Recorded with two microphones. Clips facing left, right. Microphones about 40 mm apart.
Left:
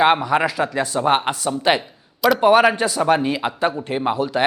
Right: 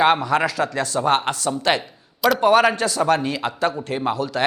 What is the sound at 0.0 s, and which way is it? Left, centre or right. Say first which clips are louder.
A man's voice: left 1 dB; centre.